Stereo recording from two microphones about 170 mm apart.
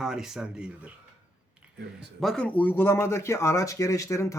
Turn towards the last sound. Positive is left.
turn(degrees=20)  # may be behind; listen again after turning